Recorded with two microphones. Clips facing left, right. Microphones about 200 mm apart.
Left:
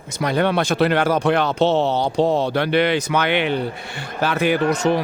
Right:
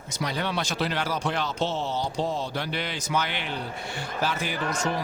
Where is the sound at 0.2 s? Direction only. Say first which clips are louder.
Left 10 dB; 55° left (ahead or behind).